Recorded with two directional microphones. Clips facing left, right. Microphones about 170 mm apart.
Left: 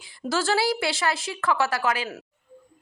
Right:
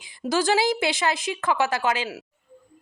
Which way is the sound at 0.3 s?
15° right (ahead or behind).